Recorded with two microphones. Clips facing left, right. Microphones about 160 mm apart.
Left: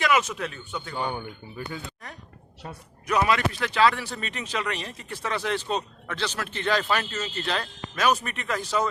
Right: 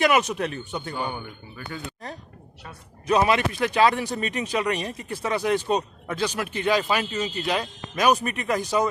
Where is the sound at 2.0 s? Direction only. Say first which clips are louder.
Right 6 dB; 30° right (ahead or behind).